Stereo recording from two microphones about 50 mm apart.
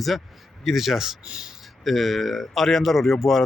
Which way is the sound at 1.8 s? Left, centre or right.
Centre.